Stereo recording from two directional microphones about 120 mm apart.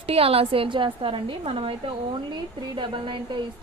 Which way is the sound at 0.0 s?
55° right (ahead or behind).